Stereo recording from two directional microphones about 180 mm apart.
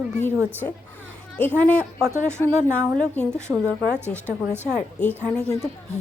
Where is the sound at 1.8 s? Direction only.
15° right (ahead or behind).